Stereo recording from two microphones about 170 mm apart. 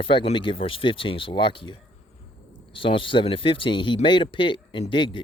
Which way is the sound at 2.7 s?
30° left (ahead or behind).